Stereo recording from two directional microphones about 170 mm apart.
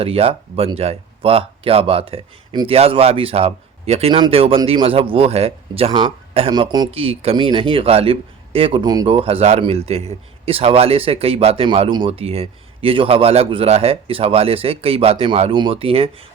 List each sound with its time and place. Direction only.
0.0 s speech: 35° right (ahead or behind)